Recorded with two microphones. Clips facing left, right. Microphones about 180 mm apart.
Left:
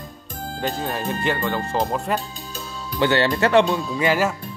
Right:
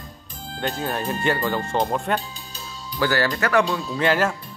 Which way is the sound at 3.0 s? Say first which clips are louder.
Left 3 dB; 25° left (ahead or behind).